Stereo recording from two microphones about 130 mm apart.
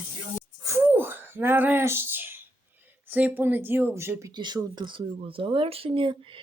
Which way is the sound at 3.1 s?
15° right (ahead or behind).